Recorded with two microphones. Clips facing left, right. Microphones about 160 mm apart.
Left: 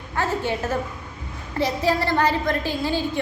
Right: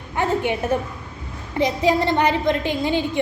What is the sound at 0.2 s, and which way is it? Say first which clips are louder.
A woman's voice: right 3 dB; 15° right (ahead or behind).